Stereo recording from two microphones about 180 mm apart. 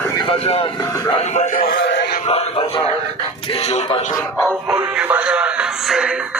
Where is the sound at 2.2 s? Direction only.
35° left (ahead or behind).